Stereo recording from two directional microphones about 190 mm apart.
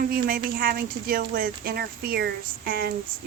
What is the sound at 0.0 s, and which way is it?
Speech, 50° right (ahead or behind).